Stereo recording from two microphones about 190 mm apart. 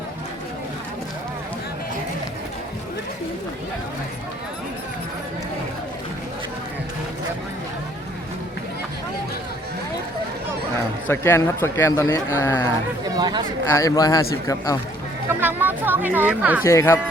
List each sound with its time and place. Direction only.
11.1 s speech: 15° left (ahead or behind)
13.1 s speech: 20° right (ahead or behind)
13.7 s a man's voice: 20° left (ahead or behind)
15.3 s speech: 10° right (ahead or behind)
16.6 s speech: 15° left (ahead or behind)